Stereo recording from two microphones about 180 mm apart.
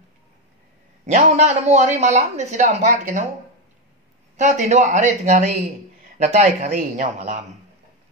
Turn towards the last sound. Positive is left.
turn(degrees=-40)  # may be behind; listen again after turning